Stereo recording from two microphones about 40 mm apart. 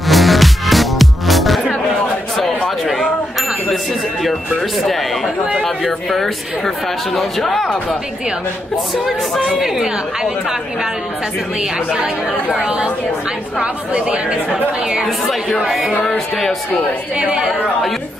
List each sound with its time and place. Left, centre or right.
0.1 s music: centre
4.2 s speech: centre
12.5 s speech: right